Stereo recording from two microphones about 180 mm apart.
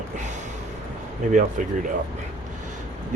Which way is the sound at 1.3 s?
45° right (ahead or behind).